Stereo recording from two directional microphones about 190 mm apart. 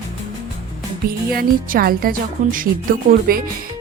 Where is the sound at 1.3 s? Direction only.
50° right (ahead or behind).